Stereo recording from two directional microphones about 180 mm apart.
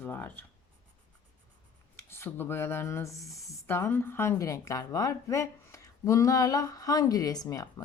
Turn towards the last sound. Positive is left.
turn(degrees=20)  # may be behind; listen again after turning